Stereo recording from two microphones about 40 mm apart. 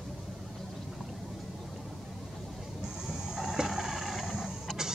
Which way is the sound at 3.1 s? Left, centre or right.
Centre.